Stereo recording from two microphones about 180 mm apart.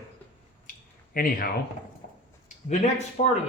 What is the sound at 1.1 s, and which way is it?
Speech, 55° left (ahead or behind).